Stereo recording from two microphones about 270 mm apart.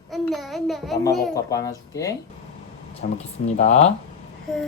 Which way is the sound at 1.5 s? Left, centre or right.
Centre.